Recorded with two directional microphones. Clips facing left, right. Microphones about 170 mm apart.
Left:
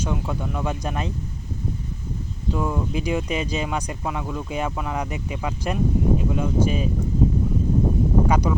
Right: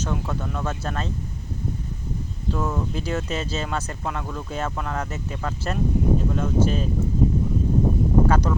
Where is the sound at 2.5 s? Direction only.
10° left (ahead or behind).